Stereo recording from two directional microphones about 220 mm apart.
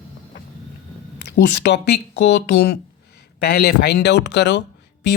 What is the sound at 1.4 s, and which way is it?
A man's voice, 50° left (ahead or behind).